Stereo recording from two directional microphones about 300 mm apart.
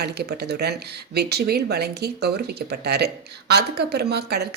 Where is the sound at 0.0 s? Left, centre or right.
Right.